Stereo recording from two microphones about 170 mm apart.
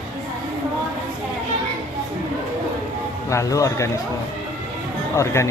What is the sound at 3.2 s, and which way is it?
Speech, 20° left (ahead or behind).